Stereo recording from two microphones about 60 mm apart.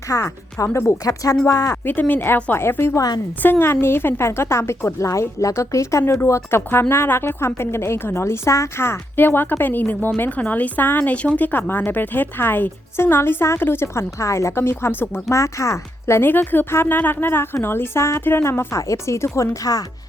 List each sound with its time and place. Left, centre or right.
0.1 s speech: left
1.8 s a woman's voice: left
4.9 s a woman's voice: left
6.7 s a woman's voice: left
15.3 s speech: left
16.3 s a woman's voice: left
19.7 s speech: left